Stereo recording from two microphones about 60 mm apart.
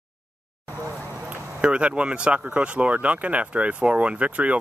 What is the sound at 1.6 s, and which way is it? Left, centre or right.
Speech, centre.